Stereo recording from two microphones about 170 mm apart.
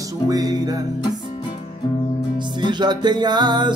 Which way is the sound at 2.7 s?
25° right (ahead or behind).